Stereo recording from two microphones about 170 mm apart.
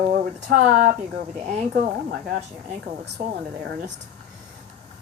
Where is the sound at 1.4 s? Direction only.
45° right (ahead or behind).